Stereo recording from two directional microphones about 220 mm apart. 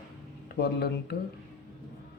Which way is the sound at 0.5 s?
50° left (ahead or behind).